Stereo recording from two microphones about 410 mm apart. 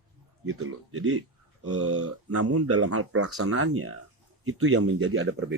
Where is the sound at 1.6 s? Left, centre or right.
Right.